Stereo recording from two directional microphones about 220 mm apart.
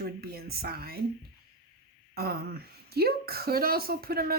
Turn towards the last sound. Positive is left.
turn(degrees=-45)  # may be behind; listen again after turning